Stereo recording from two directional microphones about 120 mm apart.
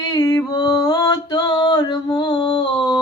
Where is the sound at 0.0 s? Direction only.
30° left (ahead or behind).